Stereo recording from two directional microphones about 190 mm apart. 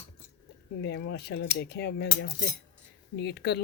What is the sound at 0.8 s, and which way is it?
Speech, 65° left (ahead or behind).